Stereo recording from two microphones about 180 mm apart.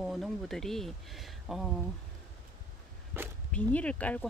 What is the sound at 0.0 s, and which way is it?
Speech, centre (ahead or behind).